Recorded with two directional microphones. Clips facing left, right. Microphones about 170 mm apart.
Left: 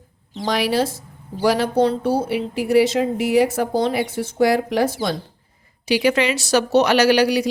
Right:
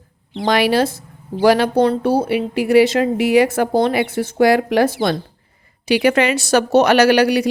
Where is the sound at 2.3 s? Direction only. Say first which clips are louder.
Right 3 dB; 70° right (ahead or behind).